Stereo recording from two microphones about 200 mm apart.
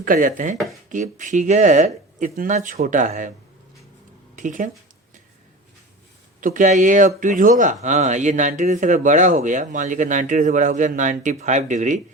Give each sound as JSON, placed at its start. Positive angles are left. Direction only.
{"t": 0.0, "sound": "speech", "side_deg": -45}
{"t": 0.5, "sound": "speech", "side_deg": 0}
{"t": 0.9, "sound": "a man's voice", "side_deg": -40}
{"t": 4.4, "sound": "a man's voice", "side_deg": -40}
{"t": 6.4, "sound": "a man's voice", "side_deg": -40}